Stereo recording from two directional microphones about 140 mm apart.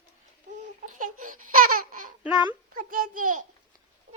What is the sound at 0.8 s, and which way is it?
Babbling, 70° right (ahead or behind).